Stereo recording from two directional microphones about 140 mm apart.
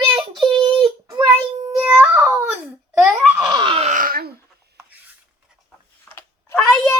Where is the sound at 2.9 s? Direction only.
5° right (ahead or behind).